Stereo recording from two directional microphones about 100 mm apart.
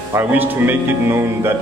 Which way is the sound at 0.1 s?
20° right (ahead or behind).